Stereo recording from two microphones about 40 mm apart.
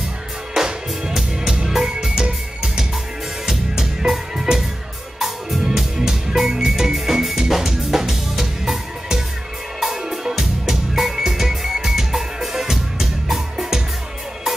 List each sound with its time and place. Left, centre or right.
0.6 s music: centre
1.4 s music: right